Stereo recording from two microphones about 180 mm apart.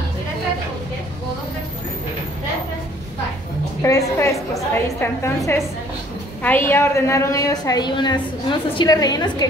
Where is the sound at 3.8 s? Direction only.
15° left (ahead or behind).